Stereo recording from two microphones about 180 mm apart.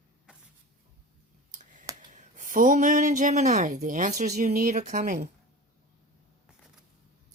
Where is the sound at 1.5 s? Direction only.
45° right (ahead or behind).